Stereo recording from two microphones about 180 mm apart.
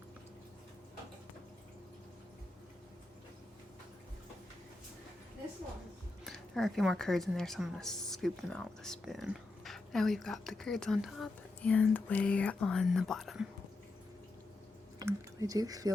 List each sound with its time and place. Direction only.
6.2 s speech: centre (ahead or behind)
14.9 s speech: 20° right (ahead or behind)